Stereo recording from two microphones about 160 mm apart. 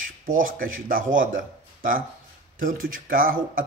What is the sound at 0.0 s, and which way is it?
A man's voice, 60° right (ahead or behind).